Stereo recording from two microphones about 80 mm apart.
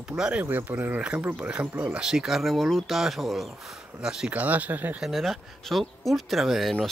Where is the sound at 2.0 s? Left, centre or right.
Centre.